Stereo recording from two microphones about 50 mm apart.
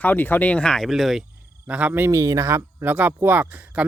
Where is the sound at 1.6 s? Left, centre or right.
Right.